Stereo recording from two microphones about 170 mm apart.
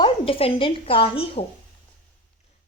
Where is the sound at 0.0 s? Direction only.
35° left (ahead or behind).